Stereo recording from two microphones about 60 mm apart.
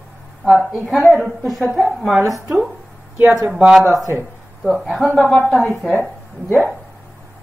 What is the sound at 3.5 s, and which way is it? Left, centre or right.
Speech, centre.